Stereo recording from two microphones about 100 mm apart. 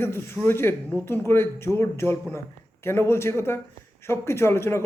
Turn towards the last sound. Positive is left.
turn(degrees=25)  # may be behind; listen again after turning